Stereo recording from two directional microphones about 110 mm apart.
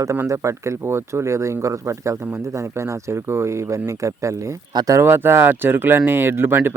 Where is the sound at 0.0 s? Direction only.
30° right (ahead or behind).